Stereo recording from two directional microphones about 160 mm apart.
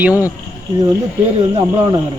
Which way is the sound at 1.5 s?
30° right (ahead or behind).